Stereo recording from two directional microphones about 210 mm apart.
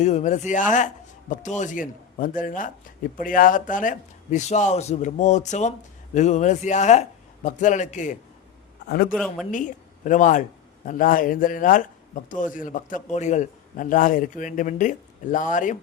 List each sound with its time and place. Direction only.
0.0 s a man's voice: 35° left (ahead or behind)
8.9 s a man's voice: 45° left (ahead or behind)
9.1 s a woman's voice: 5° left (ahead or behind)
9.5 s a woman's voice: 35° left (ahead or behind)